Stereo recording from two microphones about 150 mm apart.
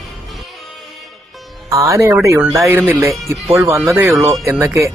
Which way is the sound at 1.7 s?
20° right (ahead or behind).